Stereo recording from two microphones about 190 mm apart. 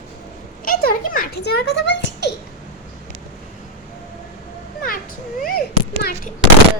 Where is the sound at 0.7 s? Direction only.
50° left (ahead or behind).